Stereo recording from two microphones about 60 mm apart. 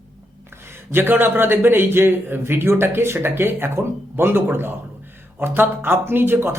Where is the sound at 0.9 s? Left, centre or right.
Right.